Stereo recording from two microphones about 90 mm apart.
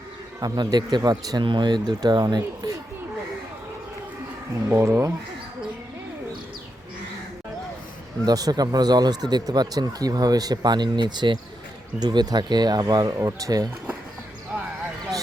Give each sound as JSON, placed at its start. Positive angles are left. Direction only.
{"t": 0.3, "sound": "speech", "side_deg": -50}
{"t": 4.7, "sound": "speech", "side_deg": -30}
{"t": 8.2, "sound": "speech", "side_deg": -45}